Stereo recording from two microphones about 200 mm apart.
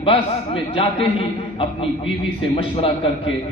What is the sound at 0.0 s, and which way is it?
A man's voice, 25° left (ahead or behind).